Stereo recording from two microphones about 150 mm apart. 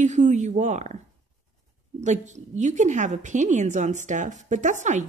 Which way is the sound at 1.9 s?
50° right (ahead or behind).